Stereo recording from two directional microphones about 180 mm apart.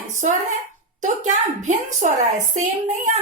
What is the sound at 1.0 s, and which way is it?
A woman's voice, 45° right (ahead or behind).